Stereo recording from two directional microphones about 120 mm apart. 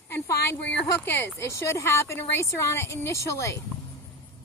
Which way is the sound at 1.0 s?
20° left (ahead or behind).